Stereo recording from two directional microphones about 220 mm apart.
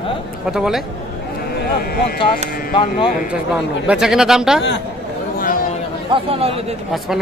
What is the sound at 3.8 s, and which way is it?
Speech, 5° right (ahead or behind).